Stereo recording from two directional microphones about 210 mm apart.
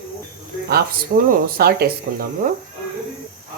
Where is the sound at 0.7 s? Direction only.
45° right (ahead or behind).